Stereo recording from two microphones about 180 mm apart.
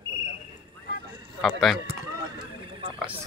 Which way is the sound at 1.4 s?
Centre (ahead or behind).